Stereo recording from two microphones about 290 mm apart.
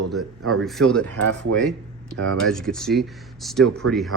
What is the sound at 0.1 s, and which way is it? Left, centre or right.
Speech, centre.